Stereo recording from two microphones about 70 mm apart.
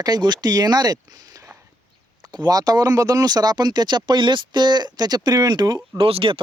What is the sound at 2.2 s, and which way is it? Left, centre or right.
Speech, right.